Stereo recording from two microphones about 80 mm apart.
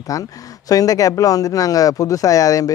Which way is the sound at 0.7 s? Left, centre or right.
Left.